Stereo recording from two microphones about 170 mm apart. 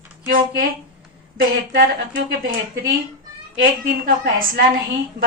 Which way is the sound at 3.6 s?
60° right (ahead or behind).